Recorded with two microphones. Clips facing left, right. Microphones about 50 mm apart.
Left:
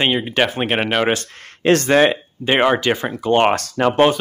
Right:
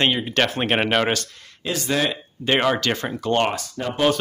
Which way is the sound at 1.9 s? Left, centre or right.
Left.